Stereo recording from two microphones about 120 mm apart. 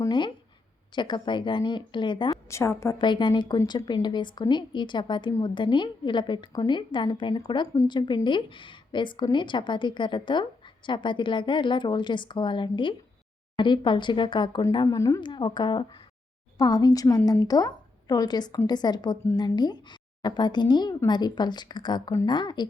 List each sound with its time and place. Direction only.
0.1 s a woman's voice: 40° left (ahead or behind)
2.5 s a woman's voice: 25° left (ahead or behind)
3.0 s a woman's voice: 40° left (ahead or behind)
14.8 s a woman's voice: 25° left (ahead or behind)
15.2 s a woman's voice: 40° left (ahead or behind)